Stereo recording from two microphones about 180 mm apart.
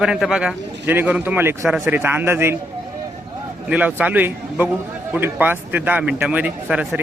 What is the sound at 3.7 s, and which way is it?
Speech, 10° right (ahead or behind).